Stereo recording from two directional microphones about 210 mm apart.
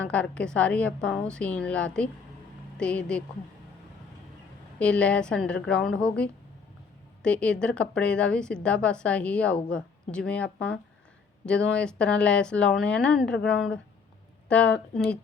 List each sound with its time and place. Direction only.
0.1 s a woman's voice: 5° left (ahead or behind)
4.8 s a woman's voice: 5° left (ahead or behind)